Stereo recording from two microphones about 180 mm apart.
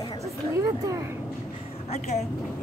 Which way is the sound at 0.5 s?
15° right (ahead or behind).